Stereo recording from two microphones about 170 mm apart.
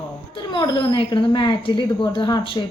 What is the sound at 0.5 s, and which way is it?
A woman's voice, 25° left (ahead or behind).